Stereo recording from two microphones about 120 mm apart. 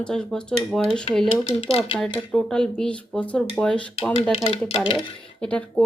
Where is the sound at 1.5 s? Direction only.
55° left (ahead or behind).